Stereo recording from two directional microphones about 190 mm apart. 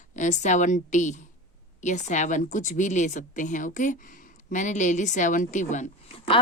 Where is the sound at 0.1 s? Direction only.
40° left (ahead or behind).